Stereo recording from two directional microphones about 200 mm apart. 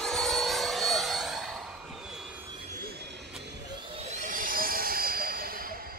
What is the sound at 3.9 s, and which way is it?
Vehicle, 35° right (ahead or behind).